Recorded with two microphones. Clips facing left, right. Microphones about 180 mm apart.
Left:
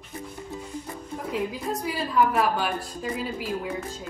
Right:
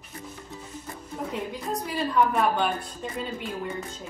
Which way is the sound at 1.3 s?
5° left (ahead or behind).